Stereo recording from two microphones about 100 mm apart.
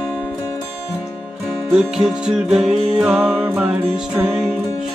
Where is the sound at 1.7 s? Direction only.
5° right (ahead or behind).